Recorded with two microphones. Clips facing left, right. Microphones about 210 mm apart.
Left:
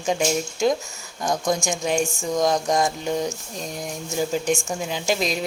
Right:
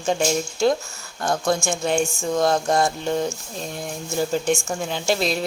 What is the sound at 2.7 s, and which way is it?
Speech, 15° left (ahead or behind).